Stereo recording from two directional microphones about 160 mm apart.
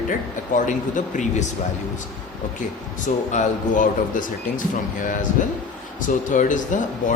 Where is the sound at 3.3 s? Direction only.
50° left (ahead or behind).